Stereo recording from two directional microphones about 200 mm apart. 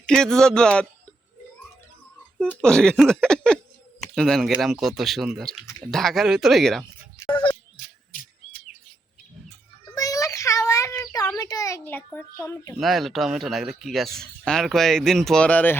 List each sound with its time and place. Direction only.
0.0 s speech: 5° left (ahead or behind)
2.4 s speech: 5° left (ahead or behind)
7.8 s bird: 45° left (ahead or behind)
9.9 s child singing: 15° left (ahead or behind)
12.8 s speech: centre (ahead or behind)